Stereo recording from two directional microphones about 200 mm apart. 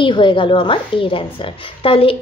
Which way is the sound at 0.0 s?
25° left (ahead or behind).